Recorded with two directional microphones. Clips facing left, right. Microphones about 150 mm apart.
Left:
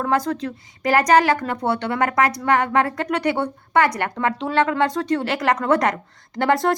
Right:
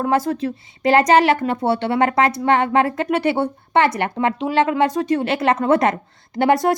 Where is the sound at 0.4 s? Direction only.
25° right (ahead or behind).